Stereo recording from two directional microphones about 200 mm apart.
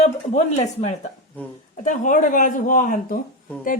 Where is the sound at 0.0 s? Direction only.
35° left (ahead or behind).